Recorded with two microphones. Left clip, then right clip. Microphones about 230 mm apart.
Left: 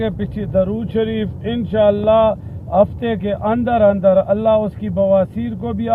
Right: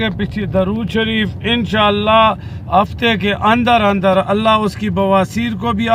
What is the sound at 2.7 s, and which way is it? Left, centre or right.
Speech, right.